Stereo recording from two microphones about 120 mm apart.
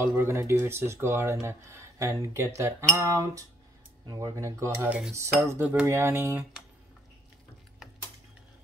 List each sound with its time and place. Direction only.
0.0 s speech: 20° right (ahead or behind)
4.8 s cutlery: 10° right (ahead or behind)
5.4 s speech: 20° right (ahead or behind)